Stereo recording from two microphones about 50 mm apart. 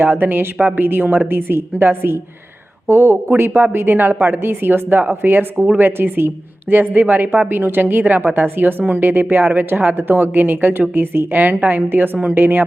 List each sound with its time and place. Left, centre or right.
0.0 s a woman's voice: right